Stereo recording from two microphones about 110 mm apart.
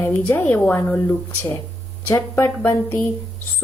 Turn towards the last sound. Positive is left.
turn(degrees=15)  # may be behind; listen again after turning